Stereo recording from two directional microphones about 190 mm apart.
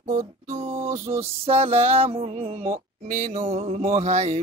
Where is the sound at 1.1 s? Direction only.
35° right (ahead or behind).